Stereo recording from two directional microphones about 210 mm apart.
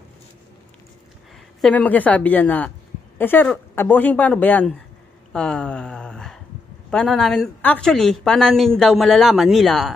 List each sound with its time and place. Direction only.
1.6 s a woman's voice: 5° left (ahead or behind)